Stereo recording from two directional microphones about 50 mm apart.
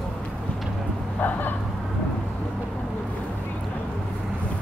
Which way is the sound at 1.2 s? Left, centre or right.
Left.